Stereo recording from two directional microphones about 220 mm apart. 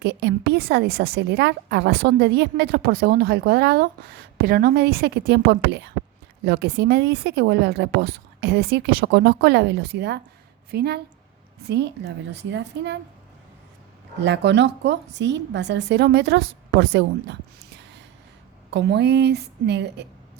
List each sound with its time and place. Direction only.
0.0 s a woman's voice: 50° right (ahead or behind)
14.2 s a woman's voice: 55° right (ahead or behind)
18.7 s a woman's voice: 50° right (ahead or behind)